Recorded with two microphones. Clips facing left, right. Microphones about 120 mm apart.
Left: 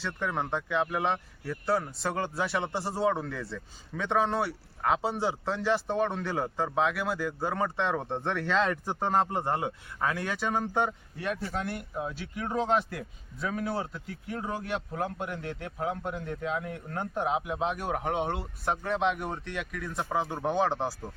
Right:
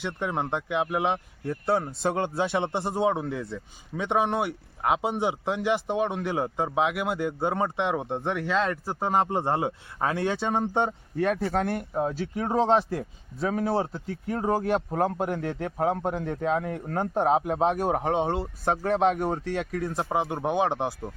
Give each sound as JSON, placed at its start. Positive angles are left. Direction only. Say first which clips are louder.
{"t": 0.0, "sound": "speech", "louder": "right 3 dB", "side_deg": -20}
{"t": 9.3, "sound": "speech", "louder": "right 4 dB", "side_deg": -25}
{"t": 11.2, "sound": "speech", "louder": "right 8 dB", "side_deg": -50}
{"t": 20.1, "sound": "speech", "louder": "right 2 dB", "side_deg": -15}